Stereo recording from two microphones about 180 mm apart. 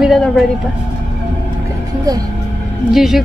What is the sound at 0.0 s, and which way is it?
Vehicle, centre (ahead or behind).